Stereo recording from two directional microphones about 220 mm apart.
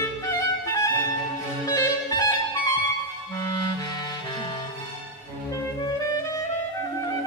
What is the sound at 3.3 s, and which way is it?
Music, 15° left (ahead or behind).